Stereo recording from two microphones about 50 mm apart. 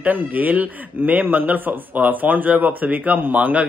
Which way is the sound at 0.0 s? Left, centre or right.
Right.